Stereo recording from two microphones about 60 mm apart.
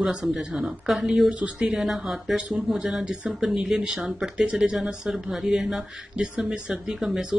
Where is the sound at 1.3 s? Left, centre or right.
Centre.